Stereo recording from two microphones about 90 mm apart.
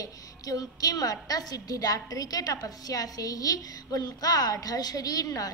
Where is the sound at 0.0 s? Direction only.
40° left (ahead or behind).